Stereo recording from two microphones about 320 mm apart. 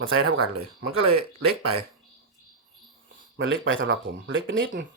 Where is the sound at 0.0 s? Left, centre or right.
Right.